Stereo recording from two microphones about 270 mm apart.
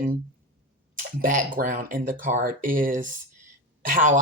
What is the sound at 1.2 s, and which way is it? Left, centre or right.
Speech, right.